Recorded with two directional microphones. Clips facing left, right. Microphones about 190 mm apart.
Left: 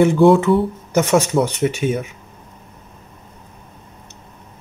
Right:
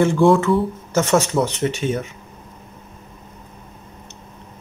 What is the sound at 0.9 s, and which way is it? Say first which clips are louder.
Speech: left 2 dB; 15° left (ahead or behind).